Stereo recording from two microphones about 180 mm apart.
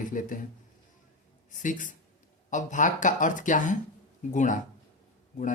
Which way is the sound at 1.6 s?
45° left (ahead or behind).